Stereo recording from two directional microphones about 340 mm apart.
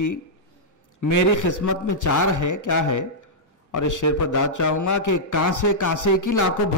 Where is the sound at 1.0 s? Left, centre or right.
Left.